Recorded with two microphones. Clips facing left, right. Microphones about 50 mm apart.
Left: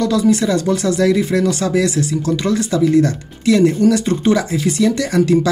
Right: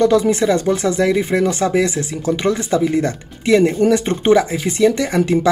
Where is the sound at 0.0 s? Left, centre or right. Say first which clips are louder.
Right 1 dB; right.